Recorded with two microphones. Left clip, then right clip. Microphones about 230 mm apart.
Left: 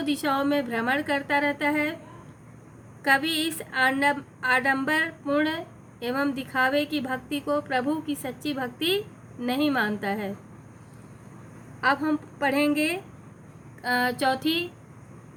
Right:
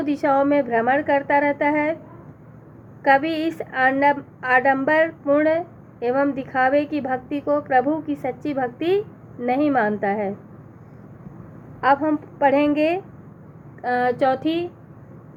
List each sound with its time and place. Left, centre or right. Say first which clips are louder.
0.0 s a woman's voice: right 7 dB; left
3.1 s a woman's voice: right 5 dB; left
11.8 s a woman's voice: right 6 dB; left
13.8 s a woman's voice: right 5 dB; left